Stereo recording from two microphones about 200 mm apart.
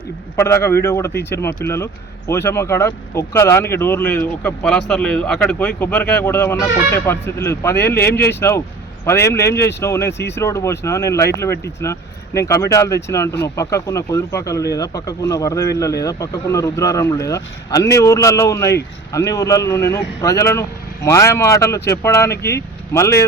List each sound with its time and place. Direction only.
0.3 s speech: 15° left (ahead or behind)